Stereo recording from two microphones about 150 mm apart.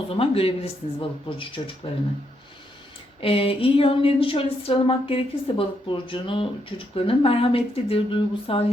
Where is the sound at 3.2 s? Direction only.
40° left (ahead or behind).